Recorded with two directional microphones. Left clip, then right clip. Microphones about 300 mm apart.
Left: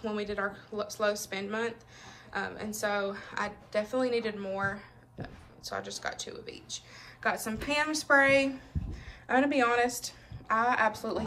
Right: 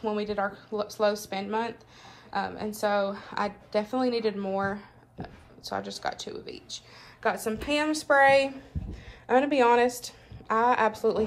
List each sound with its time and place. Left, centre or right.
0.0 s a woman's voice: centre